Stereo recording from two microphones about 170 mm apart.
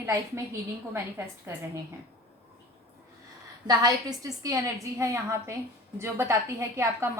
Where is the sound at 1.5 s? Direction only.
15° right (ahead or behind).